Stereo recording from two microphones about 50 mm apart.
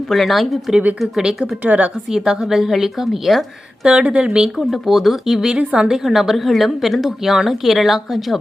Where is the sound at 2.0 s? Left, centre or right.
Centre.